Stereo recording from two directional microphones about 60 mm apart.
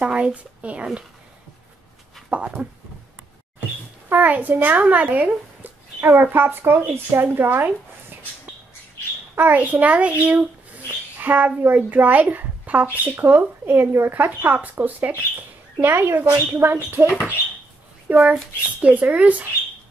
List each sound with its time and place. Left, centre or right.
0.0 s a child's voice: centre
2.2 s dog: right
4.1 s speech: right
9.3 s a child's voice: right
15.8 s speech: right
18.0 s a child's voice: right